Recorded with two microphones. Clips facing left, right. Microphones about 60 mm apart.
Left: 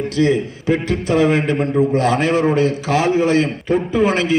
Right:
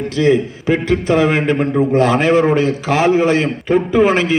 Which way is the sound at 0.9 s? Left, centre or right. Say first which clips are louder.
Right 2 dB; right.